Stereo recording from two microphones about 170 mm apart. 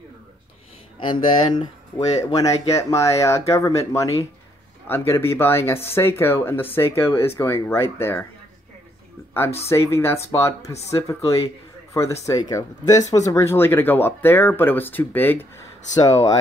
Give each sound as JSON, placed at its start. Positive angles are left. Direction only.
{"t": 0.9, "sound": "speech", "side_deg": 30}
{"t": 9.7, "sound": "speech", "side_deg": 15}